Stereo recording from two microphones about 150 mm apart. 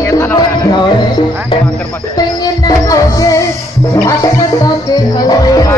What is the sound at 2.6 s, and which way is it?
Music, 20° left (ahead or behind).